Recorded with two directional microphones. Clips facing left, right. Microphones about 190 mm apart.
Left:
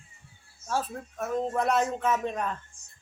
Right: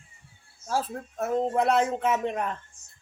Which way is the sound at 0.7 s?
25° right (ahead or behind).